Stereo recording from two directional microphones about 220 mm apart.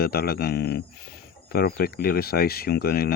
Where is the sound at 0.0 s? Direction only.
45° left (ahead or behind).